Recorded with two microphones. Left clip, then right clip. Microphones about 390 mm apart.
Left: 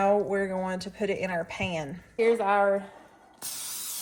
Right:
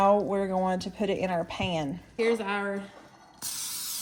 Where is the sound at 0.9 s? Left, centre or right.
Right.